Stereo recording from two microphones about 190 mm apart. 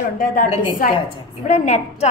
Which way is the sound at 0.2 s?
50° left (ahead or behind).